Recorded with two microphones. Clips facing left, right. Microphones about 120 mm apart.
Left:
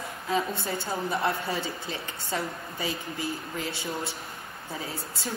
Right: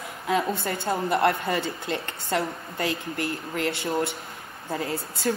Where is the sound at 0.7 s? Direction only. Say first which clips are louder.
Right 5 dB; 60° right (ahead or behind).